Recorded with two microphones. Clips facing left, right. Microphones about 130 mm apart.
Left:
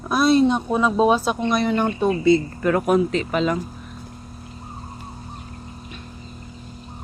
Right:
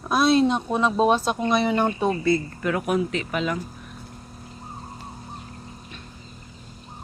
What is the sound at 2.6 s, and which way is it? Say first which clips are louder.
Speech: left 5 dB; 40° left (ahead or behind).